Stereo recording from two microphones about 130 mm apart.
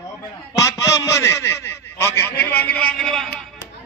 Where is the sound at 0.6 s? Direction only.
25° left (ahead or behind); by 3.2 s 5° left (ahead or behind).